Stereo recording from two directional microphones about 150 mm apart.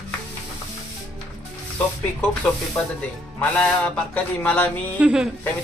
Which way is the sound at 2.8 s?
15° left (ahead or behind).